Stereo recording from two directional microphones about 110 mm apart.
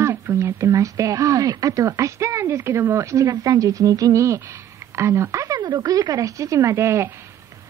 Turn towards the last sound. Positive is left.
turn(degrees=-25)  # may be behind; listen again after turning